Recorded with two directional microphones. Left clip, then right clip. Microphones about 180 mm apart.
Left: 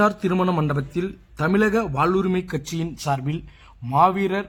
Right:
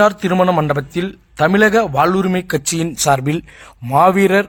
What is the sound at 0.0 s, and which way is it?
A man's voice, 20° right (ahead or behind).